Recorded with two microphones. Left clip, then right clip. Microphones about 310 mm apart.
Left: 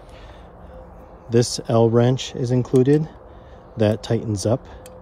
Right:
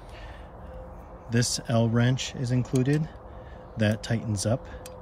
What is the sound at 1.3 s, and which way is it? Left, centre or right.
Speech, centre.